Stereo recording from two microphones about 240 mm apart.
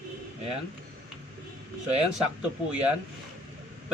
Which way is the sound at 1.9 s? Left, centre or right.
Right.